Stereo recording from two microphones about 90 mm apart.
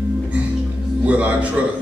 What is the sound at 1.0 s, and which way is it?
Speech, 15° right (ahead or behind).